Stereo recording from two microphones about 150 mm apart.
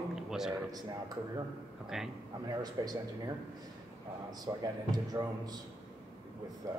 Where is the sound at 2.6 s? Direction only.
25° right (ahead or behind).